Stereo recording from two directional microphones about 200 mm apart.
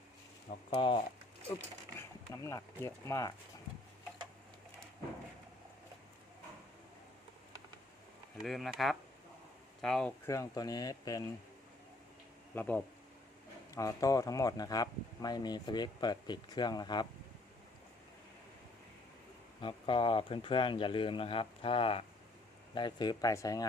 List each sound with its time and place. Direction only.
0.8 s speech: 25° left (ahead or behind)
8.4 s speech: centre (ahead or behind)
10.2 s speech: 15° left (ahead or behind)
12.5 s speech: 10° left (ahead or behind)
19.6 s speech: 25° left (ahead or behind)